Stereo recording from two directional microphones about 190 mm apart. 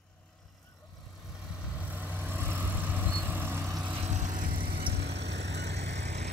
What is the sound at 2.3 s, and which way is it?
Vehicle, 10° right (ahead or behind).